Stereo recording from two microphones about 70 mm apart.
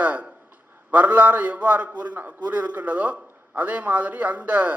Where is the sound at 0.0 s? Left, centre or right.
Right.